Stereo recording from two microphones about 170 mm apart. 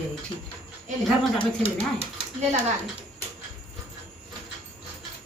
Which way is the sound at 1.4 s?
30° left (ahead or behind).